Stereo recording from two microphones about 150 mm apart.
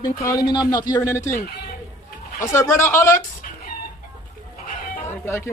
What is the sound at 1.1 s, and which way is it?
Speech, 15° left (ahead or behind).